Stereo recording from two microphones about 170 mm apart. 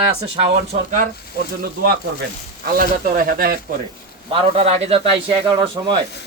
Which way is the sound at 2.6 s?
60° right (ahead or behind).